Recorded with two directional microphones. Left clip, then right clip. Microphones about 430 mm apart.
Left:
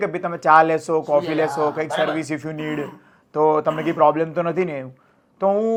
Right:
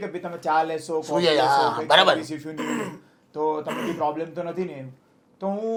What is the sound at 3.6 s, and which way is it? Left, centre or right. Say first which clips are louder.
Speech: left 7 dB; right.